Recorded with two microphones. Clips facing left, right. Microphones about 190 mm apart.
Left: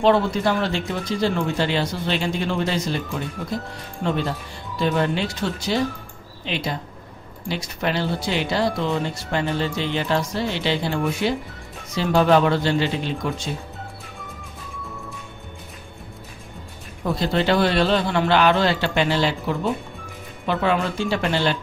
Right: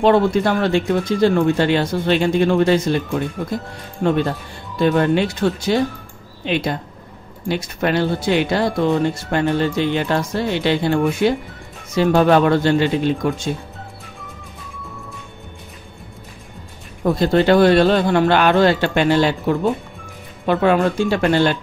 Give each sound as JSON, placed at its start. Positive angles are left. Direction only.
{"t": 0.0, "sound": "speech", "side_deg": -55}
{"t": 4.0, "sound": "speech", "side_deg": -50}
{"t": 17.0, "sound": "speech", "side_deg": -50}